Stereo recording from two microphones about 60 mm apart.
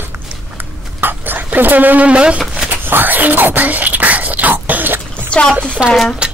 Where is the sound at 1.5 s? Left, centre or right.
Right.